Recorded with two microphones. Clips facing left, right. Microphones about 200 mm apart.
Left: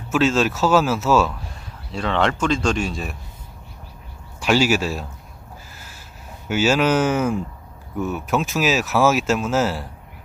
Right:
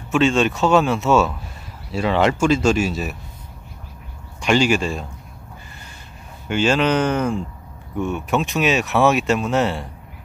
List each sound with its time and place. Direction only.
0.1 s speech: centre (ahead or behind)
4.4 s speech: 5° left (ahead or behind)
5.7 s gasp: 5° left (ahead or behind)
6.5 s speech: 5° left (ahead or behind)